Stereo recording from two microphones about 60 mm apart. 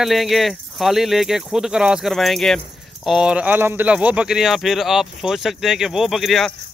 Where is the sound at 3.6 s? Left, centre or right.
Right.